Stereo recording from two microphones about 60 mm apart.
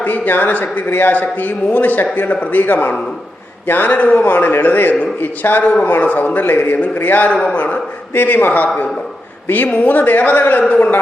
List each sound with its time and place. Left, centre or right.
0.0 s a man's voice: left
7.3 s a man's voice: centre
7.5 s a man's voice: left
9.8 s a man's voice: left